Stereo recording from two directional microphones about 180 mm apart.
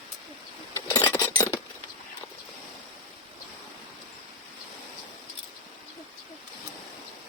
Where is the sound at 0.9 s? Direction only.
25° left (ahead or behind).